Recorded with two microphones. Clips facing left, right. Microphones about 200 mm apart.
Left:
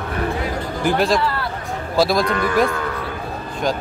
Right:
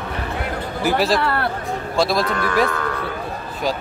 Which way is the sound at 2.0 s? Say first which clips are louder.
Left 2 dB; centre (ahead or behind).